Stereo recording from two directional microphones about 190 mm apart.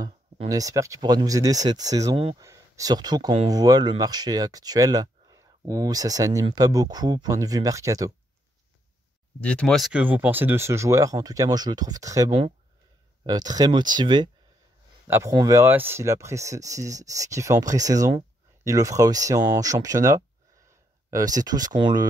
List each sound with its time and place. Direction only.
0.0 s speech: 20° right (ahead or behind)
9.4 s speech: 5° left (ahead or behind); by 12.3 s 20° right (ahead or behind)
12.3 s speech: 30° right (ahead or behind)
13.2 s speech: 20° right (ahead or behind)
15.0 s speech: 10° right (ahead or behind)
21.4 s speech: 20° right (ahead or behind)